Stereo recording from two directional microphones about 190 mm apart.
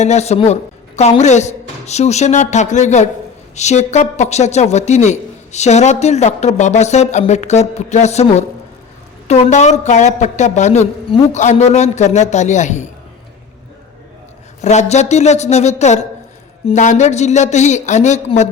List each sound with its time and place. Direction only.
0.0 s a woman's voice: 35° left (ahead or behind)
14.6 s a woman's voice: 35° left (ahead or behind)